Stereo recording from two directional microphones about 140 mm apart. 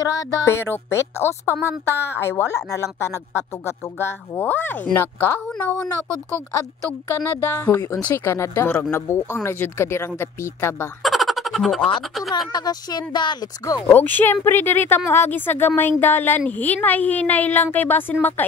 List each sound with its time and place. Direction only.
0.0 s a woman's voice: 25° left (ahead or behind)
7.2 s a woman's voice: 15° left (ahead or behind)
11.0 s a sound: centre (ahead or behind)
12.0 s speech: centre (ahead or behind)
12.5 s a woman's voice: 30° left (ahead or behind)
13.7 s a woman's voice: 15° left (ahead or behind)